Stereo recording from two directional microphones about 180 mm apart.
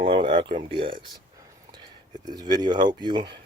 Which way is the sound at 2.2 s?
20° right (ahead or behind).